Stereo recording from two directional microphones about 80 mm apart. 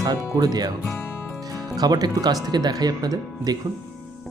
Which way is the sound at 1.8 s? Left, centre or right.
Right.